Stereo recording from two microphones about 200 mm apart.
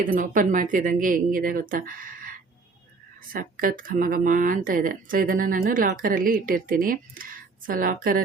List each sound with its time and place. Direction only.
0.0 s speech: 45° right (ahead or behind)
3.3 s speech: 45° right (ahead or behind)